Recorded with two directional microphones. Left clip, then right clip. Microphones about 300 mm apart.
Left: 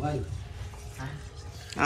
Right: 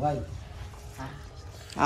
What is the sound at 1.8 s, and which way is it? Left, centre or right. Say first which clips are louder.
Speech: right 1 dB; centre.